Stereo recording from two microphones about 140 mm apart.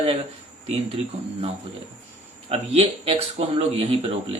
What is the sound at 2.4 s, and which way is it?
Speech, 45° right (ahead or behind).